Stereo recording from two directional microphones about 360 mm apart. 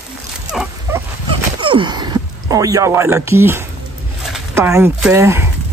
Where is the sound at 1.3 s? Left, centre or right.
Centre.